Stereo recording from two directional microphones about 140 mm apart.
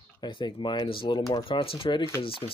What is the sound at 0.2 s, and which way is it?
Speech, 35° left (ahead or behind).